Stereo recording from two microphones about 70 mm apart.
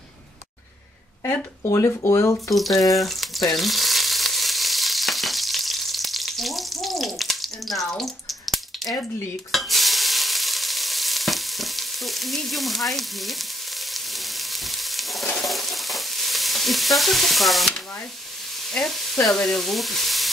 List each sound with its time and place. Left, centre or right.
1.7 s speech: left
2.5 s frying: centre
9.5 s stir: centre
18.7 s speech: centre
19.2 s frying: centre